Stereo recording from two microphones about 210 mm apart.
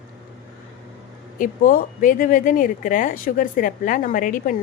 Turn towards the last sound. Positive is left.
turn(degrees=40)  # may be behind; listen again after turning